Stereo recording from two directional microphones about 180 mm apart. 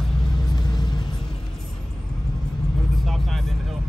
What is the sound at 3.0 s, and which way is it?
Vehicle, centre (ahead or behind).